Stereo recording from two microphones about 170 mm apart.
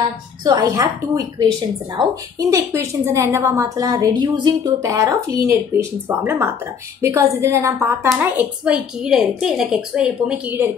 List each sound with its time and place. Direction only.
0.4 s a woman's voice: 25° right (ahead or behind)